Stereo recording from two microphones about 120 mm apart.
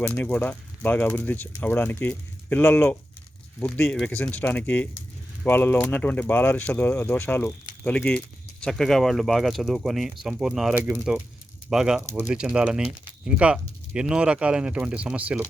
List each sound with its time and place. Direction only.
0.0 s speech: 15° left (ahead or behind); by 15.4 s 10° right (ahead or behind)